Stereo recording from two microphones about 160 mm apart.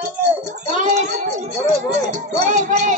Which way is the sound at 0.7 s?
45° right (ahead or behind).